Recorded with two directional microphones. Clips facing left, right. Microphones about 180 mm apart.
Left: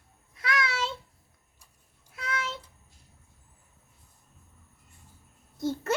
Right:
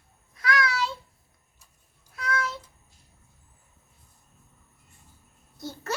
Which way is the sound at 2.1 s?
25° left (ahead or behind).